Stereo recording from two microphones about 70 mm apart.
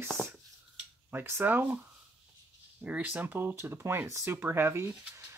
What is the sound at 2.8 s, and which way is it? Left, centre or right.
Speech, right.